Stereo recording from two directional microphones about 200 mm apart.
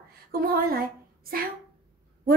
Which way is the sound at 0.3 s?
45° right (ahead or behind).